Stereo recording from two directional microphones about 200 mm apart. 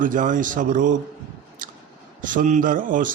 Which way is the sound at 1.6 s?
45° right (ahead or behind).